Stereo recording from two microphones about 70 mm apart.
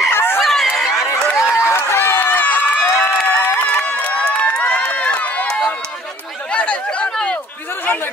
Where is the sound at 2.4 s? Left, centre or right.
Left.